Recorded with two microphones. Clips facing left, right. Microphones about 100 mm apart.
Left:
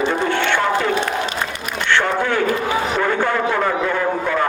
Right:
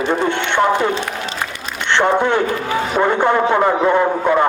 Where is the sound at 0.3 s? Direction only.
20° right (ahead or behind).